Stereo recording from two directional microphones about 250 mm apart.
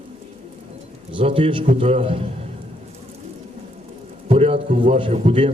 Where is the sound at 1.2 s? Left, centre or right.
Right.